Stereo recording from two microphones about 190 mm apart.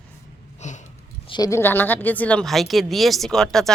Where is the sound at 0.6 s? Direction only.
40° left (ahead or behind).